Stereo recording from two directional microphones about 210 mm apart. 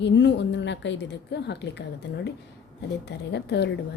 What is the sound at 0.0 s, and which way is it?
A woman's voice, 55° left (ahead or behind).